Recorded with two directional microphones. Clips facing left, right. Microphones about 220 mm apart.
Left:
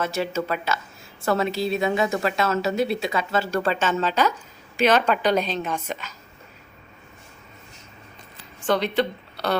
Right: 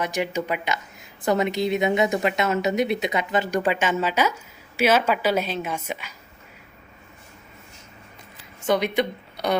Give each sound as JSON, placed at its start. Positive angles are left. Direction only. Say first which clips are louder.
{"t": 0.0, "sound": "a woman's voice", "louder": "even", "side_deg": -15}
{"t": 8.6, "sound": "speech", "louder": "even", "side_deg": -10}